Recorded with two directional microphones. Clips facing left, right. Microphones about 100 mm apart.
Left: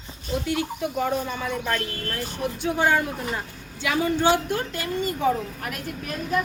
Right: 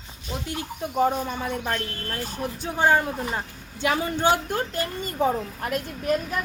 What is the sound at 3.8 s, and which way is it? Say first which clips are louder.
A woman's voice: left 1 dB; 40° right (ahead or behind).